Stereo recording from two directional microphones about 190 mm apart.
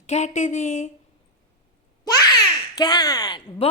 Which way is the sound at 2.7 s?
20° left (ahead or behind).